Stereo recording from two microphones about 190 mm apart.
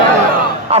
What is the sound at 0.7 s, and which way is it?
Music, 30° right (ahead or behind).